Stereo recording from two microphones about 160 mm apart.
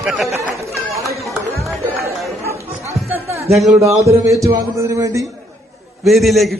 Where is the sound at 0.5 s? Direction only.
20° right (ahead or behind).